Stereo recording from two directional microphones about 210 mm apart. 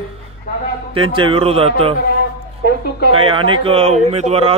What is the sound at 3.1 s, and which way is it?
A man's voice, 25° right (ahead or behind).